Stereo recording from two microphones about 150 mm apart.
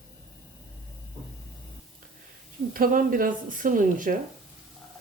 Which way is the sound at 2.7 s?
70° right (ahead or behind).